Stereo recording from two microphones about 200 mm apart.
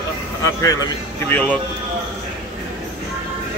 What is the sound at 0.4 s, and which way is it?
Speech, 15° left (ahead or behind).